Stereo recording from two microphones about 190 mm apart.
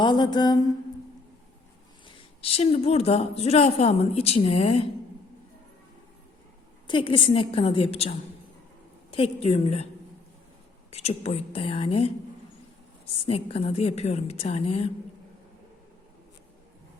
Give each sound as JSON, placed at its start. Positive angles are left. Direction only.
{"t": 0.0, "sound": "a woman's voice", "side_deg": 25}
{"t": 2.0, "sound": "a woman's voice", "side_deg": 30}
{"t": 6.8, "sound": "a woman's voice", "side_deg": 25}
{"t": 10.9, "sound": "a woman's voice", "side_deg": 35}
{"t": 13.2, "sound": "a woman's voice", "side_deg": 30}